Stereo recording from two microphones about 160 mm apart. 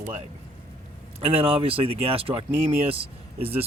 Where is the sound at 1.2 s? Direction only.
35° right (ahead or behind).